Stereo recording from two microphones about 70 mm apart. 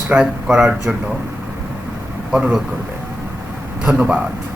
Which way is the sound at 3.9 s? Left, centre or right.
Centre.